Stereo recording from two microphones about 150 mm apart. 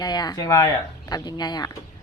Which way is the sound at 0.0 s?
30° left (ahead or behind).